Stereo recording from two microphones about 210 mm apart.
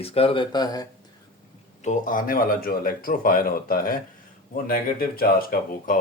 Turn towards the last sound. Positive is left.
turn(degrees=40)  # may be behind; listen again after turning